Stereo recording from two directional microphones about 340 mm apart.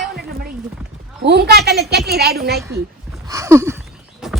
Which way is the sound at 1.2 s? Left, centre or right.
Right.